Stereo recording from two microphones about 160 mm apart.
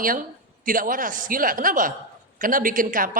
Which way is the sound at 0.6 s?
60° right (ahead or behind).